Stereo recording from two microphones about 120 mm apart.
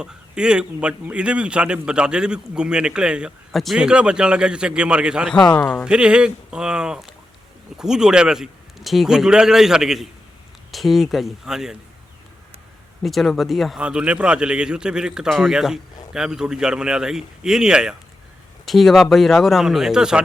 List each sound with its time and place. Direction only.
0.0 s a man's voice: 5° right (ahead or behind)
13.0 s a man's voice: centre (ahead or behind)